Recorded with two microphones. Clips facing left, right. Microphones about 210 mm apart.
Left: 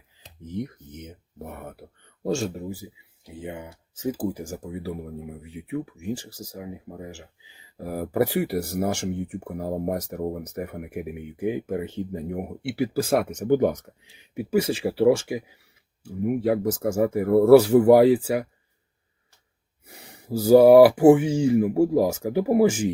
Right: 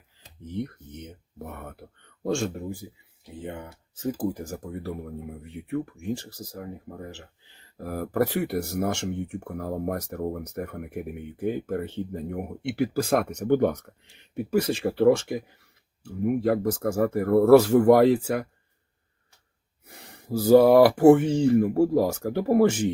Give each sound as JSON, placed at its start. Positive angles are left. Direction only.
{"t": 0.5, "sound": "speech", "side_deg": 10}
{"t": 20.1, "sound": "speech", "side_deg": 10}